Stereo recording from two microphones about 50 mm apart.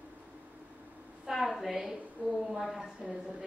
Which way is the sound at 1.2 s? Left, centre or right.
Centre.